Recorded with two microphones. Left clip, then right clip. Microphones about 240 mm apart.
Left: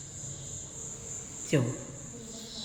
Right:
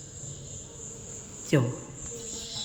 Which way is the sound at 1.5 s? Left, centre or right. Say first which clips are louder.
Right 3 dB; centre.